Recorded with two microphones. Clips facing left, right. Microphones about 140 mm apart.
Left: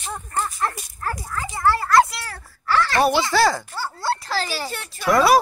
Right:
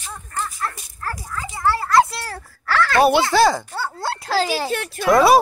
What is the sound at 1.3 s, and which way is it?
Children playing, 15° right (ahead or behind).